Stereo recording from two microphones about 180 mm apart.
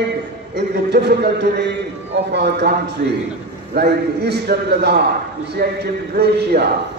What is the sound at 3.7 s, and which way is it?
A man's voice, 65° right (ahead or behind).